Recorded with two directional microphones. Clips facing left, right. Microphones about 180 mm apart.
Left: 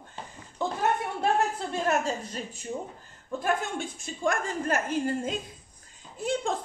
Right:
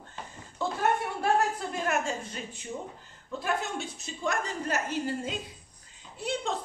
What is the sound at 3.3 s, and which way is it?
A woman's voice, 50° left (ahead or behind).